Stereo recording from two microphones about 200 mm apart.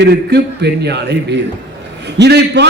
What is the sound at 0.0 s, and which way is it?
A man's voice, 60° right (ahead or behind).